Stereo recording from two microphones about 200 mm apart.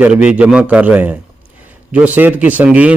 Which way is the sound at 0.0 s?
5° right (ahead or behind).